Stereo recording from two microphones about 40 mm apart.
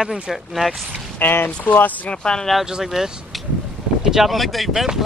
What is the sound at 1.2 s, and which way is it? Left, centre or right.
Speech, left.